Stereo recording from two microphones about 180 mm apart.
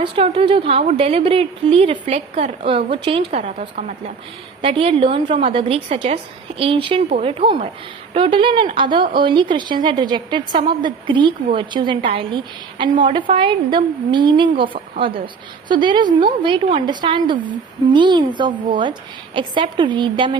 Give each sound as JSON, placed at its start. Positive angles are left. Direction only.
{"t": 0.0, "sound": "a woman's voice", "side_deg": -30}